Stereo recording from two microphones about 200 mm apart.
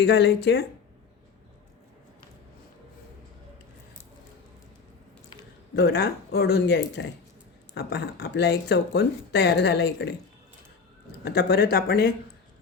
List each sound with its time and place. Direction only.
0.0 s speech: 55° left (ahead or behind)
5.7 s speech: 55° left (ahead or behind)
11.3 s speech: 55° left (ahead or behind)